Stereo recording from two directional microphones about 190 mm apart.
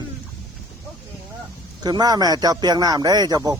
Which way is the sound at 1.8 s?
20° right (ahead or behind).